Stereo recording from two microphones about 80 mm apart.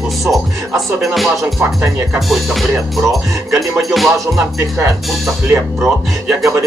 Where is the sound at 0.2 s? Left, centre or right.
Centre.